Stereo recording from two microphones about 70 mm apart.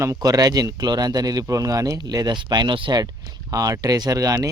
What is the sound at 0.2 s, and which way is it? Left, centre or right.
Speech, right.